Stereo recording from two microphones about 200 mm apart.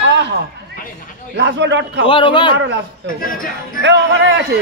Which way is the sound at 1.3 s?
60° right (ahead or behind).